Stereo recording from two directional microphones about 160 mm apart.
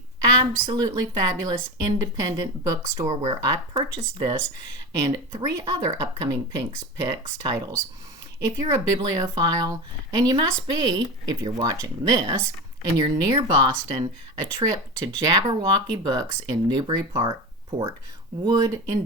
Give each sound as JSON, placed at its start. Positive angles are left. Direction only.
{"t": 0.2, "sound": "a woman's voice", "side_deg": -25}
{"t": 15.3, "sound": "a woman's voice", "side_deg": -20}